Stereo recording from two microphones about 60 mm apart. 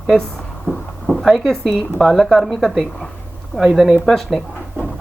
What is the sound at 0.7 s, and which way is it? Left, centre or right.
Speech, left.